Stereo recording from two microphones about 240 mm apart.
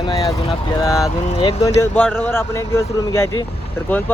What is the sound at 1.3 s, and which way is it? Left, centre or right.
Speech, left.